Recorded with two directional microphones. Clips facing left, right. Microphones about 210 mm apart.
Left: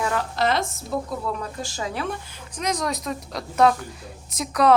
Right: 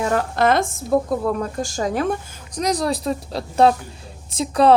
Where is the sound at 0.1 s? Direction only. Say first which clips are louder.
Right 5 dB; 50° right (ahead or behind).